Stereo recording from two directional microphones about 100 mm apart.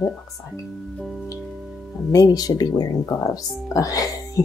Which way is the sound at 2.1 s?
35° left (ahead or behind).